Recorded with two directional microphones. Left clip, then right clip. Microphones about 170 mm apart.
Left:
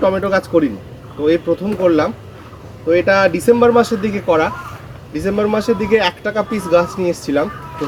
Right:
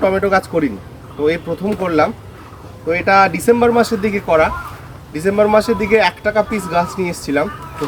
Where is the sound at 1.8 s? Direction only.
25° right (ahead or behind).